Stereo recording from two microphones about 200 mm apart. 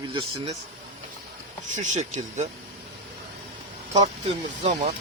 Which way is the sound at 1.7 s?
35° right (ahead or behind).